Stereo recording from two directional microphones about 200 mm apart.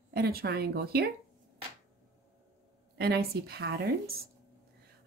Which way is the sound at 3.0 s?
50° right (ahead or behind).